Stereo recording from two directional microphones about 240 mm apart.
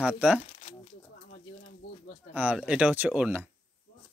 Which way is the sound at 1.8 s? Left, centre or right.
Left.